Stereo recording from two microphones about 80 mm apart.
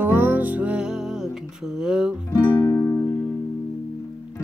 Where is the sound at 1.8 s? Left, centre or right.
Centre.